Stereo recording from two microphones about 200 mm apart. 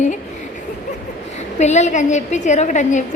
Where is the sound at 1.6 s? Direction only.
35° left (ahead or behind).